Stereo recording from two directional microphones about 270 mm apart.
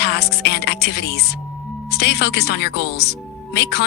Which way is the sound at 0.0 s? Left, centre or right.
Left.